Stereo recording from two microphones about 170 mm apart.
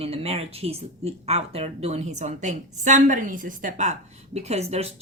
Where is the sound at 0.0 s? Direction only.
35° right (ahead or behind).